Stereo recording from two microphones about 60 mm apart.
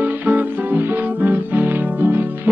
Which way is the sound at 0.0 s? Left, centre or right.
Right.